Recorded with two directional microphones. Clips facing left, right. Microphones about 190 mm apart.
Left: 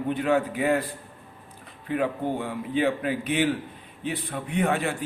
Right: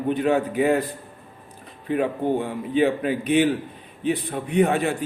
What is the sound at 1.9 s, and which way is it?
A man's voice, 20° right (ahead or behind).